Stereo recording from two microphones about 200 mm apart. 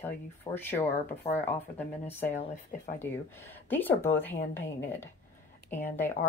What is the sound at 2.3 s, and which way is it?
Speech, 40° left (ahead or behind).